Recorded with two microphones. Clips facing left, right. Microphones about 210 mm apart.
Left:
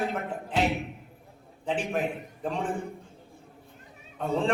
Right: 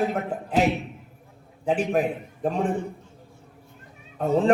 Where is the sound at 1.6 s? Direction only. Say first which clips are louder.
Right 6 dB; 40° right (ahead or behind).